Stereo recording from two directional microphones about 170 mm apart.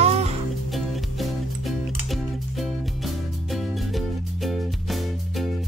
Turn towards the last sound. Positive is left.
turn(degrees=0)  # may be behind; listen again after turning